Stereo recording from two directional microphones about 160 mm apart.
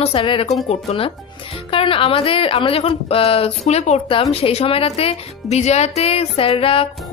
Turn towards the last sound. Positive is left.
turn(degrees=35)  # may be behind; listen again after turning